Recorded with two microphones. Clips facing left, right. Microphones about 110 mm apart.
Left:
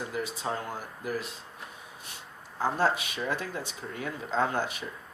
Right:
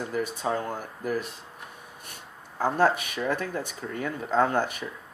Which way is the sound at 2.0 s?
50° right (ahead or behind).